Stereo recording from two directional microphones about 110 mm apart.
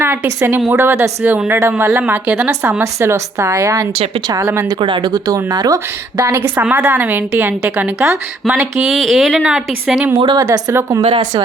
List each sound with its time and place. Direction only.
0.0 s a woman's voice: 20° right (ahead or behind)
2.5 s a woman's voice: 20° right (ahead or behind)
4.8 s speech: 45° right (ahead or behind)
5.3 s a woman's voice: 35° right (ahead or behind)
8.4 s speech: 5° right (ahead or behind)
10.2 s speech: 45° right (ahead or behind)
10.4 s a woman's voice: 25° right (ahead or behind)
11.0 s speech: 50° right (ahead or behind)